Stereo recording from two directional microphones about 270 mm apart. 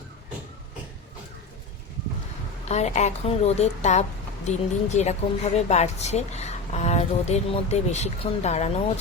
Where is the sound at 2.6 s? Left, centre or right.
Left.